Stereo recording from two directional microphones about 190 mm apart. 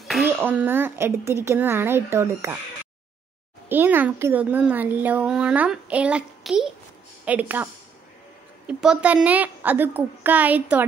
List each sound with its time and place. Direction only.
0.0 s a sound: centre (ahead or behind)
0.3 s a child's voice: 10° right (ahead or behind)
3.6 s a child's voice: 10° right (ahead or behind)